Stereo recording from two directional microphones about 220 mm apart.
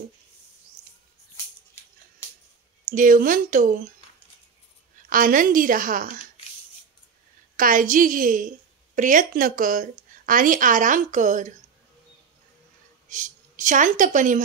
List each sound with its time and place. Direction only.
2.8 s a woman's voice: 35° right (ahead or behind)
5.1 s a woman's voice: 40° right (ahead or behind)
7.5 s a woman's voice: 40° right (ahead or behind)
13.1 s a woman's voice: 35° right (ahead or behind)